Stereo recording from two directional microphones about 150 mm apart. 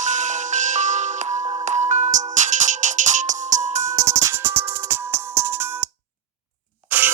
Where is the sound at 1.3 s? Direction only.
40° right (ahead or behind).